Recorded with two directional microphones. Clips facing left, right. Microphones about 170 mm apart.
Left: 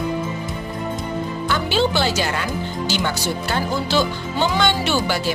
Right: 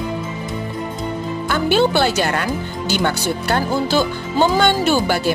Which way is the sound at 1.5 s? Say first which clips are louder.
Right 4 dB; 55° right (ahead or behind).